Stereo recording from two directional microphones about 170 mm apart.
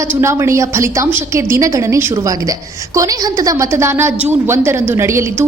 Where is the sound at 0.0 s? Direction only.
15° right (ahead or behind).